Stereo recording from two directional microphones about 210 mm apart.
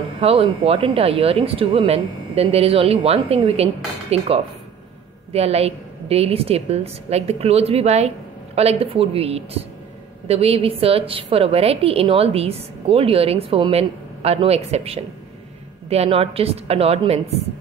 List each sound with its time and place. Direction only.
0.2 s a woman's voice: 30° right (ahead or behind)